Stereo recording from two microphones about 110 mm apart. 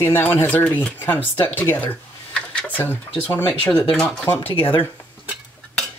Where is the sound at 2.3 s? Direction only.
10° left (ahead or behind).